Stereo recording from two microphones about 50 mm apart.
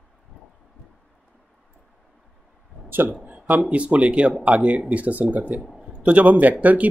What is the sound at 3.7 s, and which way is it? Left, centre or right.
Speech, right.